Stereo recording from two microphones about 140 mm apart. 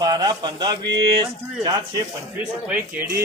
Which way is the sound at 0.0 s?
30° right (ahead or behind).